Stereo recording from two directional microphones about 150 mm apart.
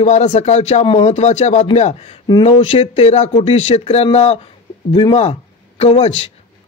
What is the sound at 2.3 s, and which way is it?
A man's voice, 35° left (ahead or behind).